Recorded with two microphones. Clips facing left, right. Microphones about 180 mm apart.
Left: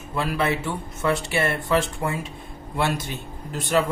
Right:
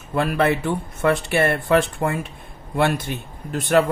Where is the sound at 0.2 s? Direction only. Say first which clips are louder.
Right 4 dB; 55° right (ahead or behind).